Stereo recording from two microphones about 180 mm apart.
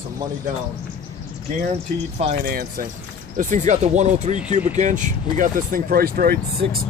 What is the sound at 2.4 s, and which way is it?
Speech, 55° right (ahead or behind).